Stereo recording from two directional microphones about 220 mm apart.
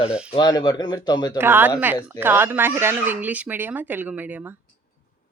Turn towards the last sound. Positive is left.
turn(degrees=-10)  # may be behind; listen again after turning